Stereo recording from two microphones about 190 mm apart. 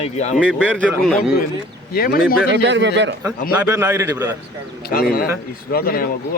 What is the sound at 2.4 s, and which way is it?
Speech, 70° right (ahead or behind).